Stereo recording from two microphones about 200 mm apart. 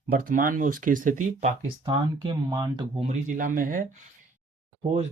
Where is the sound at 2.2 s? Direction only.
20° right (ahead or behind).